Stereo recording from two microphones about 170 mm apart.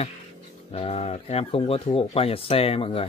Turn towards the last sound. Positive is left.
turn(degrees=35)  # may be behind; listen again after turning